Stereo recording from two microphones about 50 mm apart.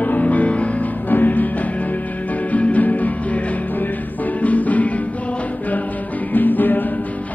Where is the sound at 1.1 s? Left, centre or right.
Left.